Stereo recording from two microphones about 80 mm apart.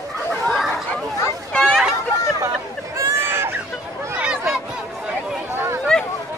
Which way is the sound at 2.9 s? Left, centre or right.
Right.